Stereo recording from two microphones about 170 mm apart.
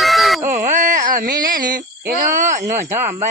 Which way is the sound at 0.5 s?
50° right (ahead or behind).